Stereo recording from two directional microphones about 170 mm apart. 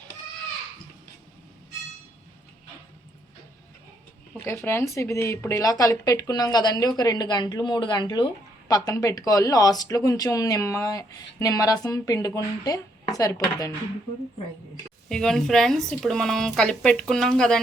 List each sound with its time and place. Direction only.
4.4 s speech: 15° left (ahead or behind)
15.1 s speech: 5° left (ahead or behind)